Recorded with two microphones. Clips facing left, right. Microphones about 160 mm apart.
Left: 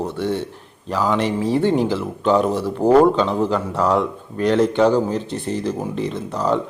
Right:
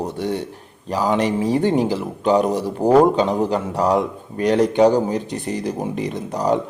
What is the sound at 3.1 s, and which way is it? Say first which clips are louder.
Speech: even; 45° right (ahead or behind).